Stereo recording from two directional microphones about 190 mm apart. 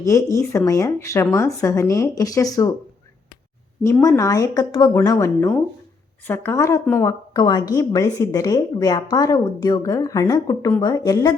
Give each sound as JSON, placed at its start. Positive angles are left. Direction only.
{"t": 0.0, "sound": "speech", "side_deg": 15}
{"t": 4.0, "sound": "a woman's voice", "side_deg": 15}